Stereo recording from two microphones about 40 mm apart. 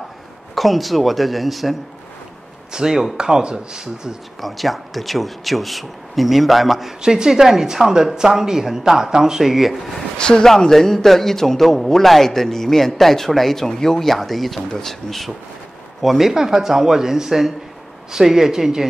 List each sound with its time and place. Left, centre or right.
0.6 s speech: centre
2.7 s speech: centre
4.4 s speech: centre
7.0 s speech: centre
10.1 s speech: left
10.4 s a man's voice: centre